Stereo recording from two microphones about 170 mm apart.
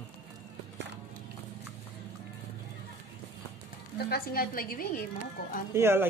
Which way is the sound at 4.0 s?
65° left (ahead or behind).